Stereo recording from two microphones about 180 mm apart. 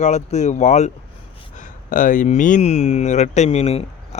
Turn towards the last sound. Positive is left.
turn(degrees=35)  # may be behind; listen again after turning